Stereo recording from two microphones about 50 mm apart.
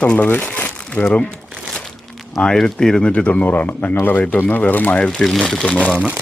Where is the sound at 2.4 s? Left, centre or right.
Centre.